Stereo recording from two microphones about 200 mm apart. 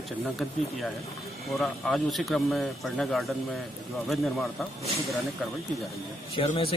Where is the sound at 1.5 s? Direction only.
Centre (ahead or behind).